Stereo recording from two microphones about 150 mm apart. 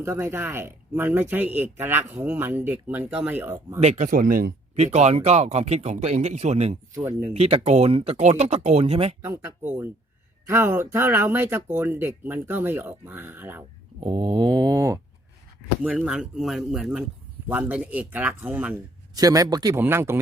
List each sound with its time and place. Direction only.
0.0 s speech: 15° right (ahead or behind)
3.8 s speech: 50° right (ahead or behind); by 4.5 s 70° right (ahead or behind)
4.8 s speech: 45° right (ahead or behind)
6.9 s speech: 15° right (ahead or behind)
7.3 s speech: 45° right (ahead or behind)
9.2 s speech: 15° right (ahead or behind)
14.0 s speech: 35° right (ahead or behind)
15.8 s speech: 5° right (ahead or behind)
19.1 s speech: 25° right (ahead or behind)